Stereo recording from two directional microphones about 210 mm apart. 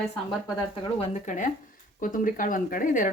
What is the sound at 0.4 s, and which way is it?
A woman's voice, 20° left (ahead or behind).